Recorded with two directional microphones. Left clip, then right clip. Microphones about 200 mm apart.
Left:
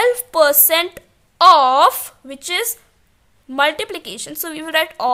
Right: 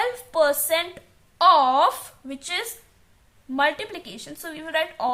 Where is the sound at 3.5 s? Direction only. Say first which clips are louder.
Left 5 dB; 50° left (ahead or behind).